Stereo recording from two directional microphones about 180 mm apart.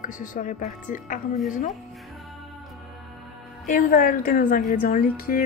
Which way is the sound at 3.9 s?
50° left (ahead or behind).